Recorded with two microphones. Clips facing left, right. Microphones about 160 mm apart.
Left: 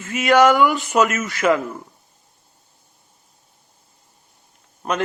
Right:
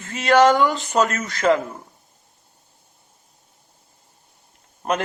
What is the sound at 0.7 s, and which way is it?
Speech, 15° left (ahead or behind).